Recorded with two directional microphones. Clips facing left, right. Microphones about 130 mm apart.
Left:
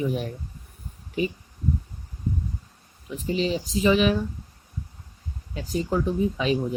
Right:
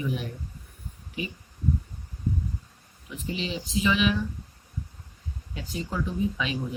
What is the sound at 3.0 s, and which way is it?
Speech, 35° left (ahead or behind).